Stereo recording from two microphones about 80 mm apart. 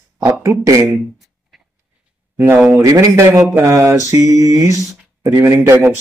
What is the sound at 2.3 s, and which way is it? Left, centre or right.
Speech, right.